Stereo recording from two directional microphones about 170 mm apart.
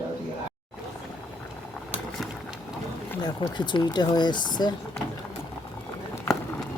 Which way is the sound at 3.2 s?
25° left (ahead or behind).